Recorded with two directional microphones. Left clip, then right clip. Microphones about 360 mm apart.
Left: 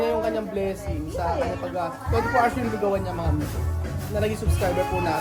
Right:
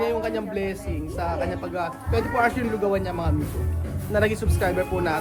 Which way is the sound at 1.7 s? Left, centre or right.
Centre.